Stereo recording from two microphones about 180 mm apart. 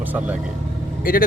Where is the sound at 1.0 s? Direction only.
50° left (ahead or behind).